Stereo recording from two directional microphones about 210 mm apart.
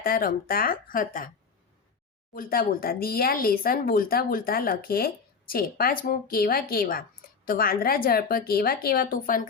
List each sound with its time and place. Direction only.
0.0 s speech: 45° left (ahead or behind)
2.3 s speech: 40° left (ahead or behind)